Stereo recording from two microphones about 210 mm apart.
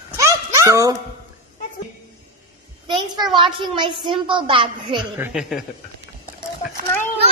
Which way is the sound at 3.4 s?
25° right (ahead or behind).